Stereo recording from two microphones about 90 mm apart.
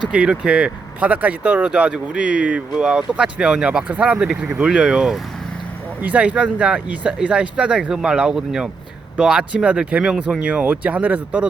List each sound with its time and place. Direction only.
0.1 s speech: 10° right (ahead or behind)